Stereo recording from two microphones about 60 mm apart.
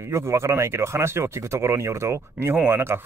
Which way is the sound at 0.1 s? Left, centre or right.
Right.